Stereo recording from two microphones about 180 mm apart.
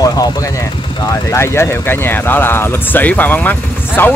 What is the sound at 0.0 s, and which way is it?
Vehicle, 20° left (ahead or behind).